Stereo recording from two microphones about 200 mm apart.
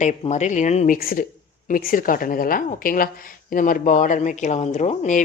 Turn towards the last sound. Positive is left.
turn(degrees=35)  # may be behind; listen again after turning